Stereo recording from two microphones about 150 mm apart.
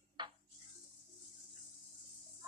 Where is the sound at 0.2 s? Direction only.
30° right (ahead or behind).